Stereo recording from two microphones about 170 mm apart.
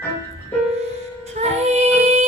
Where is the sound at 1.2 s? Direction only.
40° right (ahead or behind).